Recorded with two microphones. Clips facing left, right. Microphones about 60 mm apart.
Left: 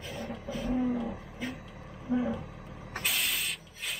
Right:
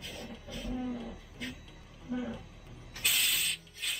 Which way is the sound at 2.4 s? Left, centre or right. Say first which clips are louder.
Left 8 dB; left.